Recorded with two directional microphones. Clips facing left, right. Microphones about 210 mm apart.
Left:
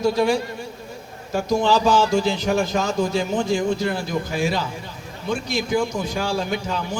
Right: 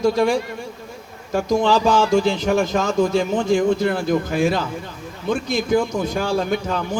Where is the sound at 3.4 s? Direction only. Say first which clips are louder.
Right 4 dB; 55° right (ahead or behind).